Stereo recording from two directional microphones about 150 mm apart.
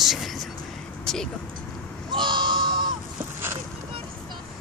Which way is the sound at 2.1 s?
30° right (ahead or behind).